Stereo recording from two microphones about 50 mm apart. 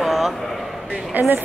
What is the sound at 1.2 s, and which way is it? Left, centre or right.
Speech, right.